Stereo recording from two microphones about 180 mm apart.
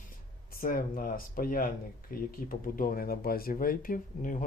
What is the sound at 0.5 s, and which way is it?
Speech, 50° left (ahead or behind).